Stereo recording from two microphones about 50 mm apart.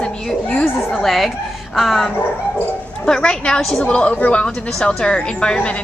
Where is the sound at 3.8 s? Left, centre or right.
Left.